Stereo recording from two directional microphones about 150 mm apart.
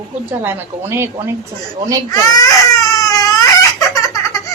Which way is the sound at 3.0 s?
25° left (ahead or behind).